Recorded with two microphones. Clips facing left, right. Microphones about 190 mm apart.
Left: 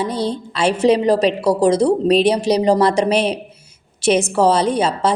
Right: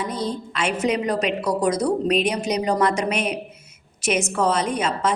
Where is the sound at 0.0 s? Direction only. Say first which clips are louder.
Left 5 dB; 30° left (ahead or behind).